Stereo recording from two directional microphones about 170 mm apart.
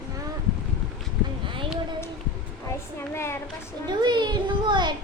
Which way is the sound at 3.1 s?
15° left (ahead or behind).